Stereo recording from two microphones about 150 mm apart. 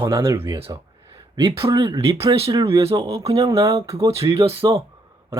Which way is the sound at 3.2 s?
25° right (ahead or behind).